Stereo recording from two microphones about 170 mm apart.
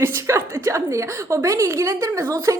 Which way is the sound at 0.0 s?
15° right (ahead or behind).